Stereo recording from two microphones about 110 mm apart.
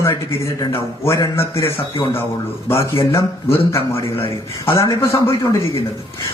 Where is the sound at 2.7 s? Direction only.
25° left (ahead or behind).